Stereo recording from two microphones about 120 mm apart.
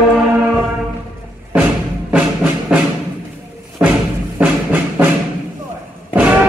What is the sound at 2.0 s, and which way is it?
Music, 10° right (ahead or behind).